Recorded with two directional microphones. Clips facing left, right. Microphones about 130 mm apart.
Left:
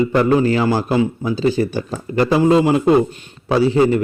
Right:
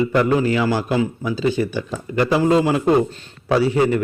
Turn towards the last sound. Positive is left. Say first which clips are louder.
# left 3 dB
turn(degrees=30)  # may be behind; listen again after turning